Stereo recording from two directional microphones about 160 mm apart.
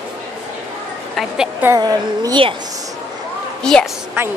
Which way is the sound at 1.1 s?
5° right (ahead or behind).